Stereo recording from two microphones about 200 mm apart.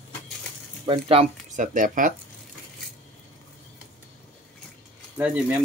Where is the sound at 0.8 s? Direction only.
30° right (ahead or behind).